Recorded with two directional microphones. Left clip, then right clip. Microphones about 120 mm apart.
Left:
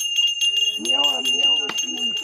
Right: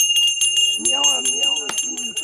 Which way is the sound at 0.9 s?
40° left (ahead or behind).